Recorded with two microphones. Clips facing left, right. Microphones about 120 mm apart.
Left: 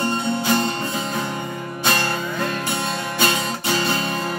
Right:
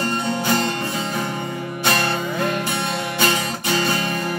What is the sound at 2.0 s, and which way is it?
Music, 20° right (ahead or behind).